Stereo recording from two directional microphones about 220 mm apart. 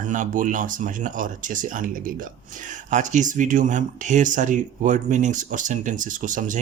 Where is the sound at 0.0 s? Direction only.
35° right (ahead or behind).